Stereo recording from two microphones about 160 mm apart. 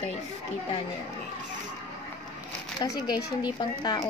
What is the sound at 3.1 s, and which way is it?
A woman's voice, 25° left (ahead or behind).